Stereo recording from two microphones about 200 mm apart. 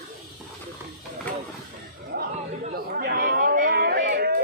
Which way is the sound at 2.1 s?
60° right (ahead or behind).